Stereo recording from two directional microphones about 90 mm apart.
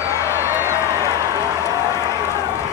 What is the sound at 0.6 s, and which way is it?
Run, 30° left (ahead or behind).